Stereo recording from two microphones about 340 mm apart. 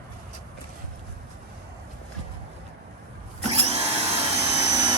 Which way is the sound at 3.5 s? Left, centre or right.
Centre.